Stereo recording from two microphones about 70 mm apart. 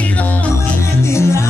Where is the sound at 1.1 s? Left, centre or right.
Left.